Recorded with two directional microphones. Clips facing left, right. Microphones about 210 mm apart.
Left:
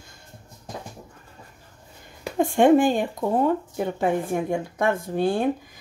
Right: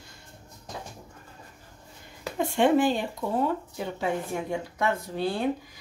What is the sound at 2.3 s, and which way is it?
Speech, 50° left (ahead or behind).